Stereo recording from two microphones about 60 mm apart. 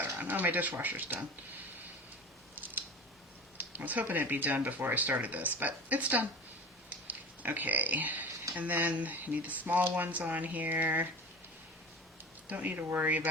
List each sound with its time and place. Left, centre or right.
0.0 s speech: right
3.7 s speech: right
12.5 s speech: right
12.7 s speech: right